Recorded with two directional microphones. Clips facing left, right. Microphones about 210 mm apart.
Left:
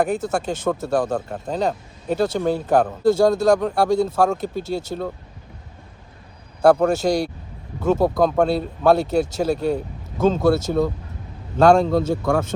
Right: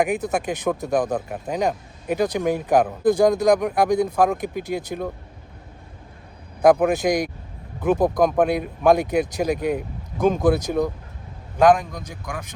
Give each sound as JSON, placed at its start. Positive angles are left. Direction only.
{"t": 0.0, "sound": "speech", "side_deg": -15}
{"t": 6.6, "sound": "speech", "side_deg": -15}